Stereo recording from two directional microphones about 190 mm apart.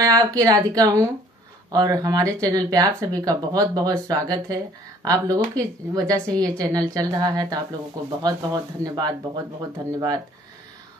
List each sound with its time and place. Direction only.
0.0 s speech: 20° right (ahead or behind)